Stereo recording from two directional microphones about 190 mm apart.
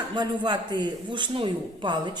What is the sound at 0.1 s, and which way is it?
A woman's voice, 25° right (ahead or behind).